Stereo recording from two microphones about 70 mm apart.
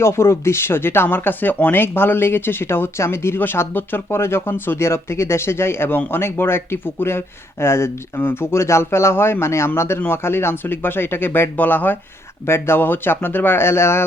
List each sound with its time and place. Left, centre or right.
0.0 s speech: left